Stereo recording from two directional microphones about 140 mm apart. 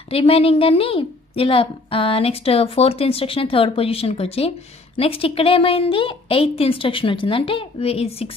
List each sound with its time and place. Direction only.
0.1 s a woman's voice: 40° left (ahead or behind)